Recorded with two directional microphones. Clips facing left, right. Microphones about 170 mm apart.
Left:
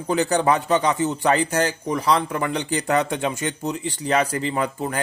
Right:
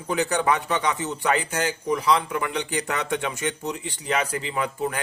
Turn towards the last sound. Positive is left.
turn(degrees=35)  # may be behind; listen again after turning